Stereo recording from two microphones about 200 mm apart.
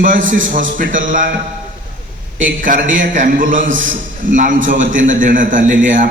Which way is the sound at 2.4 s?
40° right (ahead or behind).